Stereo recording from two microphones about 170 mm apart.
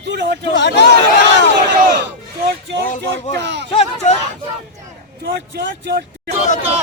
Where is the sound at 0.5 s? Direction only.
85° left.